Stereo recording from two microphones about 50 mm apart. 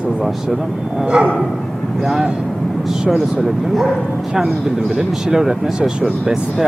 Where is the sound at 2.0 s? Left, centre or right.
Centre.